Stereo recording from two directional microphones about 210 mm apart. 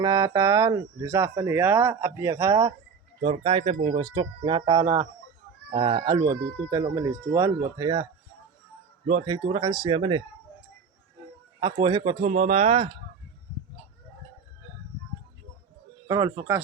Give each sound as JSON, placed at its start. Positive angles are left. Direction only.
{"t": 0.0, "sound": "speech", "side_deg": -15}
{"t": 3.2, "sound": "speech", "side_deg": -25}
{"t": 9.0, "sound": "speech", "side_deg": -25}
{"t": 11.6, "sound": "speech", "side_deg": -20}
{"t": 16.0, "sound": "speech", "side_deg": -15}